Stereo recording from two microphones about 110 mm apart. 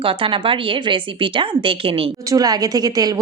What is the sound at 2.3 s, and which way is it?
Speech, 35° right (ahead or behind).